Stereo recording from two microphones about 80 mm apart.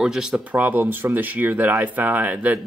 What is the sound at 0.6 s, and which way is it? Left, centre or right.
Speech, right.